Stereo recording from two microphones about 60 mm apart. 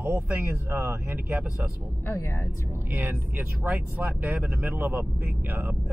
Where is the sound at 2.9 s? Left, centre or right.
Right.